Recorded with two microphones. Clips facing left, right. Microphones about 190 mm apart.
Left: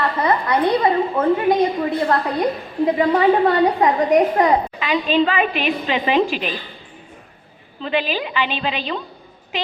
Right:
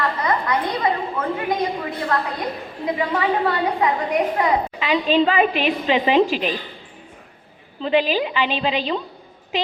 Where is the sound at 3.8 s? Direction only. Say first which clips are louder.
Left 3 dB; 40° left (ahead or behind).